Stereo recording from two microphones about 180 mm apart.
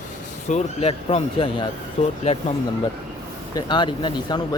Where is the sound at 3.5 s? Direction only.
25° left (ahead or behind).